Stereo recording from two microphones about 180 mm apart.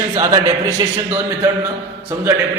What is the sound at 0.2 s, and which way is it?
Speech, 20° right (ahead or behind).